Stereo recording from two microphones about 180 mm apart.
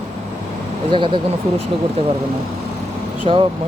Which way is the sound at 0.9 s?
25° right (ahead or behind).